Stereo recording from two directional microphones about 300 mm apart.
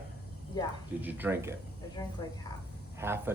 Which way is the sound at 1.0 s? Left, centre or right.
Centre.